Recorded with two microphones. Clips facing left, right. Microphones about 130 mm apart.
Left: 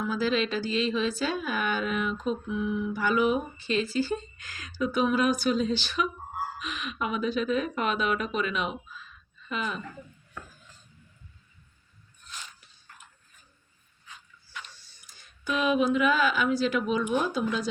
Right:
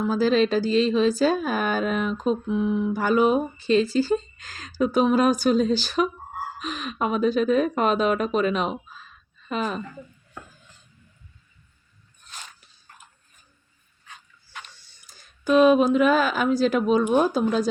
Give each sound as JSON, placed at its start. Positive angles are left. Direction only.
{"t": 0.0, "sound": "speech", "side_deg": -40}
{"t": 15.0, "sound": "speech", "side_deg": -40}